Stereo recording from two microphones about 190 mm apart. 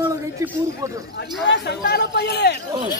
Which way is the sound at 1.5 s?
60° left (ahead or behind).